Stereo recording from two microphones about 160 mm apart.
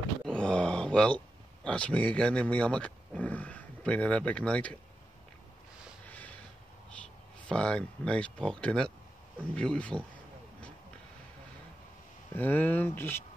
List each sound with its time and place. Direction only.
0.3 s speech: 5° left (ahead or behind)
6.0 s a sound: 10° left (ahead or behind)
7.4 s speech: 5° left (ahead or behind)
12.4 s speech: 10° left (ahead or behind)